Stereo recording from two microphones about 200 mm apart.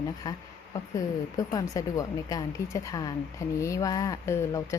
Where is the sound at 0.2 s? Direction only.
20° left (ahead or behind).